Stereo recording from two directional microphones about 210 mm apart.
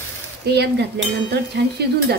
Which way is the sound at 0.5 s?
50° right (ahead or behind).